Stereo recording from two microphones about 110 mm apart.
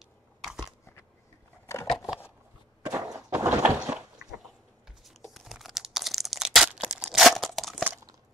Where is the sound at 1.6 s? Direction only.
25° left (ahead or behind).